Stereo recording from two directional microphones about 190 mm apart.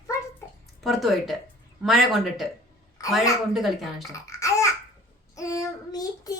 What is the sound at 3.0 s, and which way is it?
Speech, 15° left (ahead or behind).